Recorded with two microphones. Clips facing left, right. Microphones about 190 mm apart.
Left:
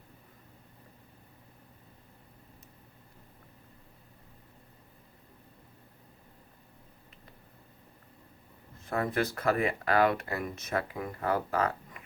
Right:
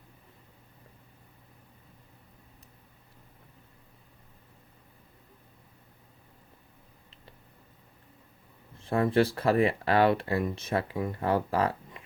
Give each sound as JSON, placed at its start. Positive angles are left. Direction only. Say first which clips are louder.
{"t": 8.8, "sound": "speech", "louder": "right 6 dB", "side_deg": -30}